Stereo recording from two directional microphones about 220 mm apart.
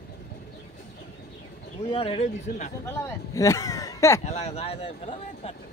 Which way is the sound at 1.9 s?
25° left (ahead or behind).